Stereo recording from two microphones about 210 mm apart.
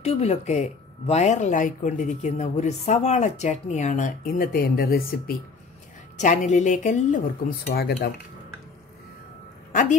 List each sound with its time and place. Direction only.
0.0 s speech: 30° left (ahead or behind); by 5.3 s 45° left (ahead or behind)
6.2 s speech: 35° left (ahead or behind)
9.7 s a sound: 35° left (ahead or behind)